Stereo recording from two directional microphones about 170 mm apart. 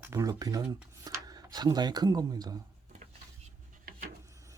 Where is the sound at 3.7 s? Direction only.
60° right (ahead or behind).